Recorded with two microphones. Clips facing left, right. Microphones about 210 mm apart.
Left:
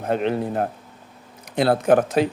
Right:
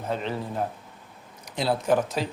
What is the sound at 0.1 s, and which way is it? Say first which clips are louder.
Speech: left 8 dB; 60° left (ahead or behind).